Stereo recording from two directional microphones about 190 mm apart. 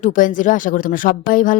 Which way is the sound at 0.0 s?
45° left (ahead or behind).